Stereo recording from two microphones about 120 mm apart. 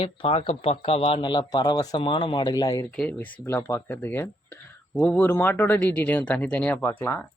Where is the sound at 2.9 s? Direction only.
10° left (ahead or behind).